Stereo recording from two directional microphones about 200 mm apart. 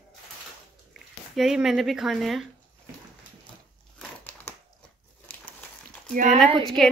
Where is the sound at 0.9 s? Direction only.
Centre (ahead or behind).